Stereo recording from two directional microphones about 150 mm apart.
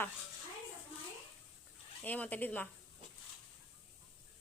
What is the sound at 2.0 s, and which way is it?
Speech, 10° left (ahead or behind).